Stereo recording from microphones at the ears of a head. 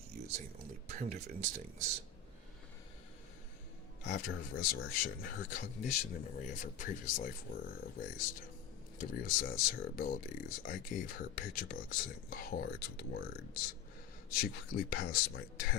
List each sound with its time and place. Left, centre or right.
0.1 s a sound: right
0.9 s speech: right
4.0 s speech: left